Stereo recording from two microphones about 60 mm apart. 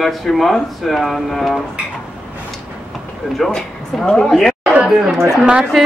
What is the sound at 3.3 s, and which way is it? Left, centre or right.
Speech, centre.